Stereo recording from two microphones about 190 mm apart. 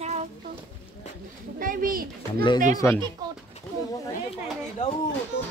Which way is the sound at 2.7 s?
15° left (ahead or behind).